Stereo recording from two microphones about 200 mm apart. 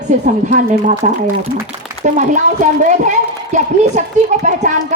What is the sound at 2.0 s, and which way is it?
A woman's voice, 40° right (ahead or behind).